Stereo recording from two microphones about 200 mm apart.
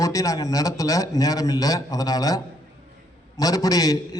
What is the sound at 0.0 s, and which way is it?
A man's voice, 15° left (ahead or behind).